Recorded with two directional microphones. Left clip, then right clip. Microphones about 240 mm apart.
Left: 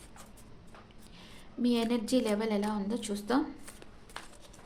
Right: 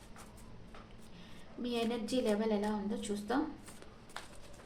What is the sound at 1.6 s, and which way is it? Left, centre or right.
A woman's voice, left.